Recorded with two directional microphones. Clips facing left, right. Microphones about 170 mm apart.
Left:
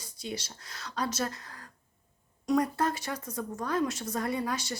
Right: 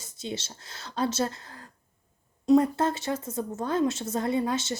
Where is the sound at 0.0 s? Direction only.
25° right (ahead or behind).